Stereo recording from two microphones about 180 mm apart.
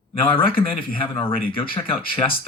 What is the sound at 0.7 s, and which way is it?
Speech, 30° left (ahead or behind).